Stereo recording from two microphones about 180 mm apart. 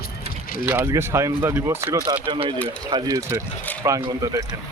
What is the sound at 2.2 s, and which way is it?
Speech, 30° right (ahead or behind).